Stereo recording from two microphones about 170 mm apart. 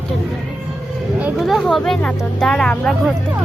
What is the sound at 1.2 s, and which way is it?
Speech, centre (ahead or behind).